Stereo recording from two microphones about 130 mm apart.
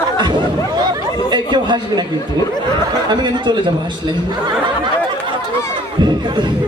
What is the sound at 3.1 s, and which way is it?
Speech, 35° right (ahead or behind).